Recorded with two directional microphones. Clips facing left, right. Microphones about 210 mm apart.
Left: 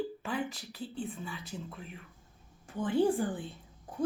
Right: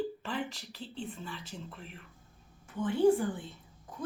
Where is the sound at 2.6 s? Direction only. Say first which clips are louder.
Right 2 dB; 35° left (ahead or behind).